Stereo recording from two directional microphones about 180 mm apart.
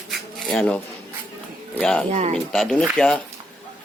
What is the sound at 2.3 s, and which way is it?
Speech, 5° left (ahead or behind).